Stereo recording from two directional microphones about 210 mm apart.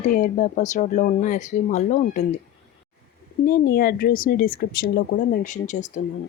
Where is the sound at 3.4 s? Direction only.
45° left (ahead or behind).